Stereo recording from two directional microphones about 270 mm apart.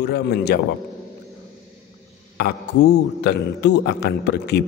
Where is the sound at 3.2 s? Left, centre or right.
Left.